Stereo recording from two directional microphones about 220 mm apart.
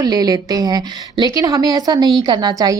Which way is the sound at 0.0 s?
15° right (ahead or behind).